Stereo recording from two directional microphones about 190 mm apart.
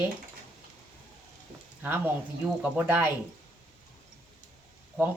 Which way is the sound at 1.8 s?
10° right (ahead or behind).